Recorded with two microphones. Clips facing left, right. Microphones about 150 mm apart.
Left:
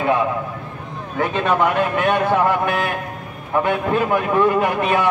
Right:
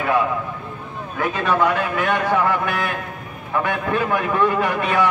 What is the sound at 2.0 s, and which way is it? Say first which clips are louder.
A man's voice: left 3 dB; 20° left (ahead or behind).